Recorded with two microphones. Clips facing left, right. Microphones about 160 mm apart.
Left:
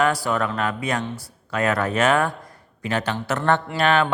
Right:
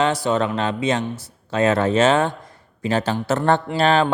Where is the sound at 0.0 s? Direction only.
20° right (ahead or behind).